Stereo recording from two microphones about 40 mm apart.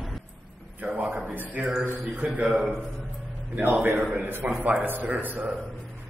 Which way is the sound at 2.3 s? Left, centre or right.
Right.